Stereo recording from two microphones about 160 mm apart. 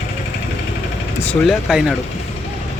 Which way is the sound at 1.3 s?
Centre (ahead or behind).